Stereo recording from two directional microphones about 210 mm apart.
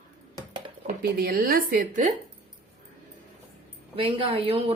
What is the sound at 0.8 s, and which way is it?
Speech, 45° right (ahead or behind).